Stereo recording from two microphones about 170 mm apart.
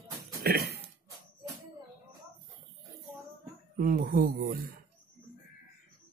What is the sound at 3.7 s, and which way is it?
Speech, 55° right (ahead or behind).